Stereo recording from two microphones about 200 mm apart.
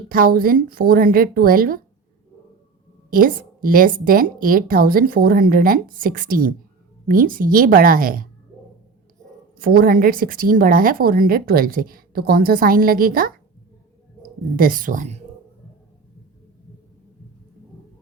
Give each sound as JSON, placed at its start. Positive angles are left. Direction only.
{"t": 0.1, "sound": "a woman's voice", "side_deg": -45}
{"t": 3.1, "sound": "a woman's voice", "side_deg": -45}
{"t": 9.6, "sound": "a woman's voice", "side_deg": -45}
{"t": 14.5, "sound": "a woman's voice", "side_deg": -45}